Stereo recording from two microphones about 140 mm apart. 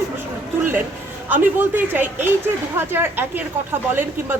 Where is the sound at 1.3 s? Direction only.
15° right (ahead or behind).